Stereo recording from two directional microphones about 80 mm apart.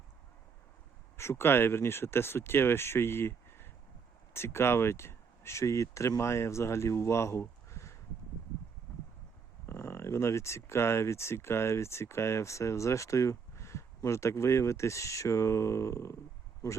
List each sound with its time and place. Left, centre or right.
1.1 s speech: left
9.6 s speech: left